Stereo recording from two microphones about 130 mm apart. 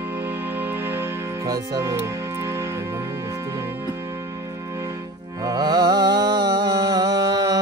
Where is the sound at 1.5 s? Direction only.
25° right (ahead or behind).